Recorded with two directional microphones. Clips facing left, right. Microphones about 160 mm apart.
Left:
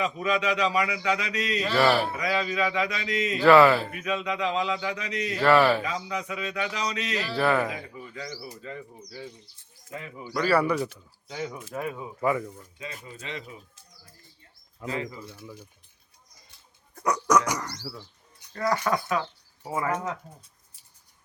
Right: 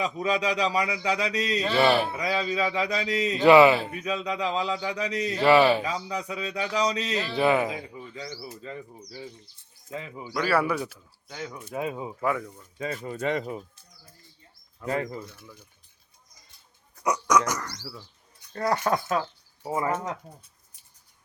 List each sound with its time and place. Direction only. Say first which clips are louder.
0.0 s a man's voice: even; 35° right (ahead or behind)
1.7 s a man's voice: even; 20° right (ahead or behind)
3.3 s speech: right 1 dB; 20° right (ahead or behind)
4.0 s a man's voice: even; 35° right (ahead or behind)
5.4 s speech: right 1 dB; 20° right (ahead or behind)
5.8 s a man's voice: right 1 dB; 35° right (ahead or behind)
10.3 s speech: left 1 dB; 5° right (ahead or behind)
11.3 s dog: left 3 dB; 10° left (ahead or behind)
11.7 s speech: right 2 dB; 20° right (ahead or behind)
12.2 s speech: left 2 dB; centre (ahead or behind)
12.8 s speech: right 11 dB; 45° right (ahead or behind)
14.8 s speech: right 4 dB; 5° left (ahead or behind)
17.2 s dog: left 1 dB; 10° left (ahead or behind)
18.5 s a man's voice: right 1 dB; 30° right (ahead or behind)